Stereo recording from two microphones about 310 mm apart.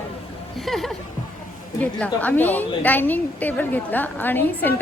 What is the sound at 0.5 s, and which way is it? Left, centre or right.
A woman's voice, centre.